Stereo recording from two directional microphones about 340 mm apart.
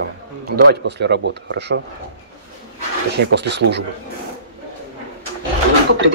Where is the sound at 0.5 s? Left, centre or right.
Right.